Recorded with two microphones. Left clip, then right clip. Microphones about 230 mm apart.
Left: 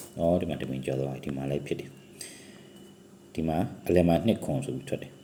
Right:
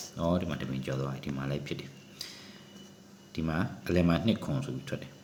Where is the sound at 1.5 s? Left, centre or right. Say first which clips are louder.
Left 5 dB; centre.